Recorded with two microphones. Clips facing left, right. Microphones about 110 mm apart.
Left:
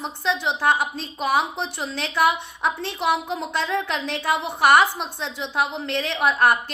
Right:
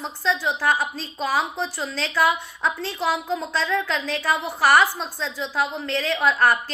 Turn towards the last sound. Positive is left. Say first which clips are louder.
# even
turn(degrees=20)  # may be behind; listen again after turning